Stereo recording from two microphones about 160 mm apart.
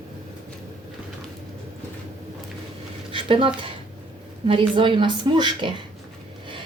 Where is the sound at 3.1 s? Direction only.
35° right (ahead or behind).